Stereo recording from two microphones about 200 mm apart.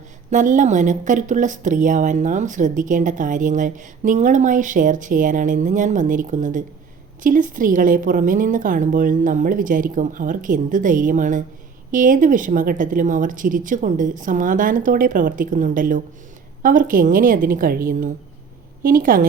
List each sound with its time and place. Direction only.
0.3 s a woman's voice: 40° right (ahead or behind)
18.8 s a woman's voice: 45° right (ahead or behind)